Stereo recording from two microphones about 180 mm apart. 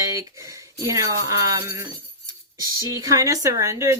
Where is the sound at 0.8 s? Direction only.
20° right (ahead or behind).